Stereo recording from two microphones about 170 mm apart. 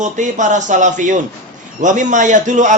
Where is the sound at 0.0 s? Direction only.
45° right (ahead or behind).